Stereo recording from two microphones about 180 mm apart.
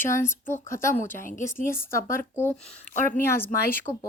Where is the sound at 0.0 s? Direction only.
15° left (ahead or behind).